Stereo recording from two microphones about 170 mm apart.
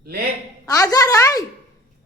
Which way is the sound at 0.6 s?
20° left (ahead or behind).